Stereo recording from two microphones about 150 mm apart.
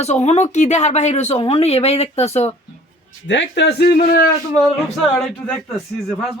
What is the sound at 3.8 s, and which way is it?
Speech, 85° left.